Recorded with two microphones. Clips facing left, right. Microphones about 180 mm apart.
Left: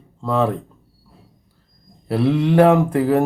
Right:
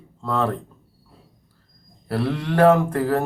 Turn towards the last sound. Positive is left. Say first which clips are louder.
# left 3 dB
turn(degrees=20)  # may be behind; listen again after turning